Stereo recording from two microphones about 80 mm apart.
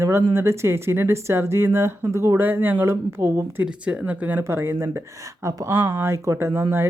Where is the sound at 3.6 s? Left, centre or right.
Centre.